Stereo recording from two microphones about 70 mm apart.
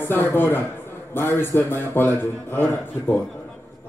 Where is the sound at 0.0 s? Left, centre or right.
Left.